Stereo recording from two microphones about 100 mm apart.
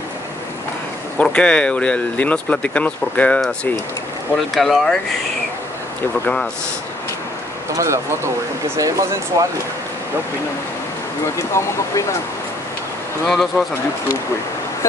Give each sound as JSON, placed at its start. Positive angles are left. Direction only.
{"t": 1.1, "sound": "speech", "side_deg": 10}
{"t": 4.6, "sound": "speech", "side_deg": 0}
{"t": 6.2, "sound": "speech", "side_deg": 10}
{"t": 7.7, "sound": "speech", "side_deg": -30}
{"t": 11.3, "sound": "speech", "side_deg": 30}
{"t": 13.3, "sound": "speech", "side_deg": 0}